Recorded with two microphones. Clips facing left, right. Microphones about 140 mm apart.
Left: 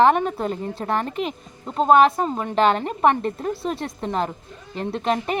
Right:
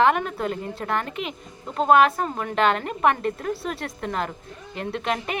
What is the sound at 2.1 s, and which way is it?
Speech, 20° left (ahead or behind).